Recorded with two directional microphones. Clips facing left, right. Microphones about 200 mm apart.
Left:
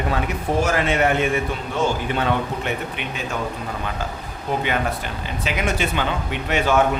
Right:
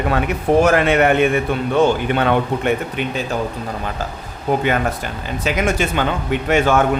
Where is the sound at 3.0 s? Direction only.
40° right (ahead or behind).